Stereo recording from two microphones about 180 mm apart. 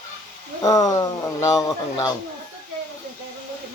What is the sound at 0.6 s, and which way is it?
Speech, 20° left (ahead or behind).